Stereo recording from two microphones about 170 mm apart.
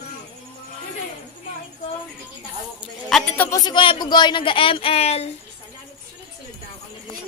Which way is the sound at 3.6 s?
30° left (ahead or behind).